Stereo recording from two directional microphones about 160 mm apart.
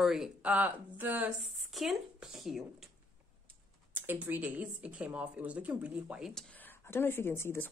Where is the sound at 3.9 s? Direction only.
15° right (ahead or behind).